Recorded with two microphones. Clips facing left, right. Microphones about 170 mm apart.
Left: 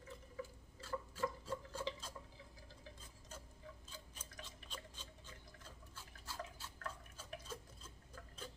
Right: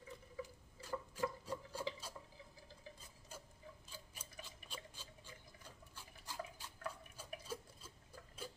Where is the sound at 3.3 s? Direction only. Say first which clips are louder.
Even; 10° right (ahead or behind).